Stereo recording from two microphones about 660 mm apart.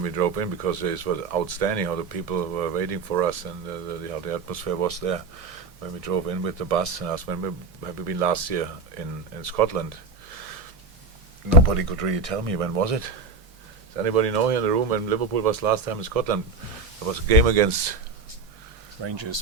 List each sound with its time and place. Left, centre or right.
0.0 s speech: right
11.6 s speech: right
19.0 s speech: right